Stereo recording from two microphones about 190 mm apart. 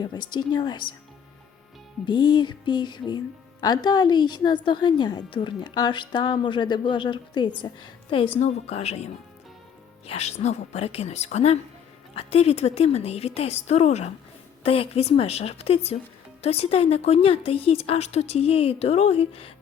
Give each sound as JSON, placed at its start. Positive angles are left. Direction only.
{"t": 0.0, "sound": "a woman's voice", "side_deg": 20}
{"t": 2.0, "sound": "a woman's voice", "side_deg": 25}
{"t": 10.1, "sound": "speech", "side_deg": 35}